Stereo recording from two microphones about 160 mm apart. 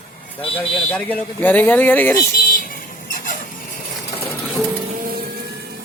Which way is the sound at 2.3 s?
60° left (ahead or behind).